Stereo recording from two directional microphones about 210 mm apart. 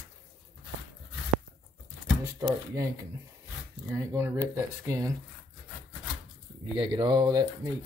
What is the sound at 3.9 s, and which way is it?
Speech, 10° right (ahead or behind).